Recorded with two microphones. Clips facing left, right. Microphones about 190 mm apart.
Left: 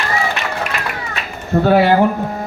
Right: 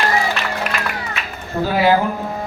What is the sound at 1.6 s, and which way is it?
Speech, 65° left (ahead or behind).